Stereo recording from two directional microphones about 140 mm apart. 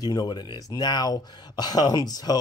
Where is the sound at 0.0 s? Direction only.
30° left (ahead or behind).